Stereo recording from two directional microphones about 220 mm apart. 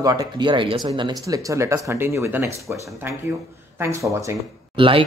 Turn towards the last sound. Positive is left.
turn(degrees=-25)  # may be behind; listen again after turning